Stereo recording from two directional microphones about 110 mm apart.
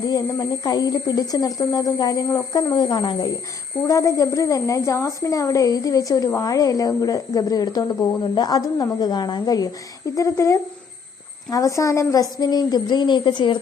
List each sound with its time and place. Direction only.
0.0 s a woman's voice: 35° left (ahead or behind)
3.8 s a woman's voice: 30° left (ahead or behind); by 13.6 s 45° left (ahead or behind)